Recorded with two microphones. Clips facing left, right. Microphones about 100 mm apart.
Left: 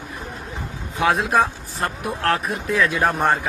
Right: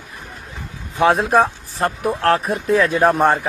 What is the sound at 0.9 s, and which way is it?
Speech, 30° right (ahead or behind).